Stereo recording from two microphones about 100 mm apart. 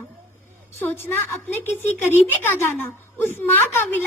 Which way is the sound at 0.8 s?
20° left (ahead or behind).